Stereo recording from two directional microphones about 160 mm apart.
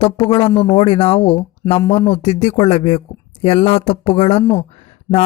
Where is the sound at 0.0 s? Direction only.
35° left (ahead or behind).